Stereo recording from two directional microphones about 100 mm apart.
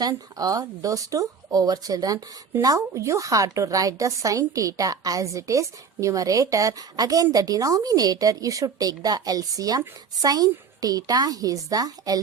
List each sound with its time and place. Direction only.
0.0 s speech: 40° right (ahead or behind)